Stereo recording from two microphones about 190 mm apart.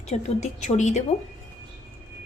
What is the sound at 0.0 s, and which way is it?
A woman's voice, 35° left (ahead or behind).